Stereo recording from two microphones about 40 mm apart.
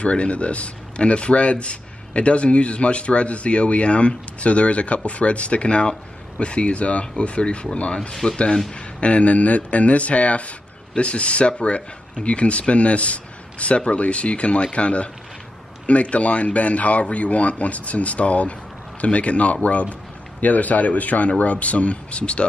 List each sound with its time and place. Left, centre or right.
0.0 s a man's voice: left